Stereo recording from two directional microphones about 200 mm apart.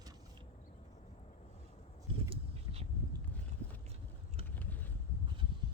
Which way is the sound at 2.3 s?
30° right (ahead or behind).